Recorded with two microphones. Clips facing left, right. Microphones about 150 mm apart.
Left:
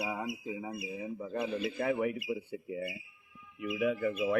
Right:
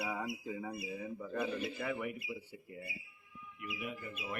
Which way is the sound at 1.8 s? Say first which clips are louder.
Left 8 dB; 60° left (ahead or behind).